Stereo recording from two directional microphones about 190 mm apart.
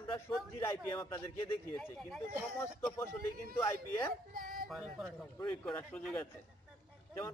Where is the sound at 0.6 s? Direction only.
15° left (ahead or behind).